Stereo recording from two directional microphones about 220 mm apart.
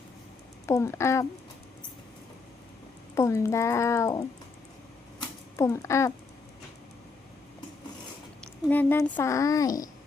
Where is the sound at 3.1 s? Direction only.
15° left (ahead or behind).